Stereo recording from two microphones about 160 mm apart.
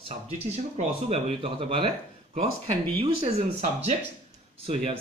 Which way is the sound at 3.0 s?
40° right (ahead or behind).